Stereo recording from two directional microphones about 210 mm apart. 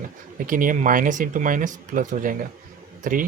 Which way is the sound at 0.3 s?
40° right (ahead or behind).